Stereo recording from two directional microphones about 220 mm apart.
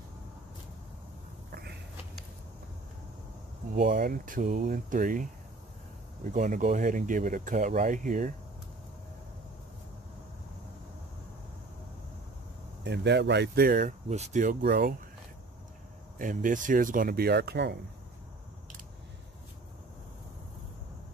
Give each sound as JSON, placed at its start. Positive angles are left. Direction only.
{"t": 1.5, "sound": "a sound", "side_deg": -45}
{"t": 3.7, "sound": "speech", "side_deg": -40}
{"t": 6.3, "sound": "speech", "side_deg": -35}
{"t": 12.8, "sound": "speech", "side_deg": -50}
{"t": 16.2, "sound": "speech", "side_deg": -35}